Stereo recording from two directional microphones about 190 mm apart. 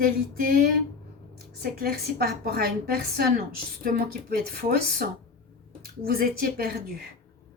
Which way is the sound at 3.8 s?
55° right (ahead or behind).